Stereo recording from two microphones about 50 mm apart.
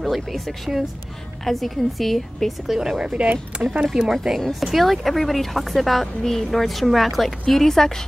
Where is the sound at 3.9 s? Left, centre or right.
Centre.